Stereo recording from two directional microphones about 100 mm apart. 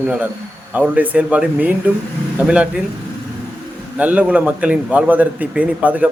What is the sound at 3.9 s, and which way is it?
A man's voice, 15° right (ahead or behind).